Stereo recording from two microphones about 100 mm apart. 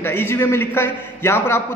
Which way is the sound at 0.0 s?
20° left (ahead or behind).